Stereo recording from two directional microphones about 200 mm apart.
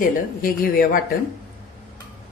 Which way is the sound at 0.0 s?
45° left (ahead or behind).